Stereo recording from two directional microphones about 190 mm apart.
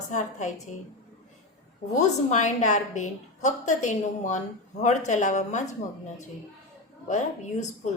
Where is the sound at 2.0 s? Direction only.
40° left (ahead or behind).